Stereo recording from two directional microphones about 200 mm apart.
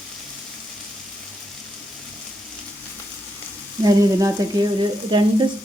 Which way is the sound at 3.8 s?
15° right (ahead or behind).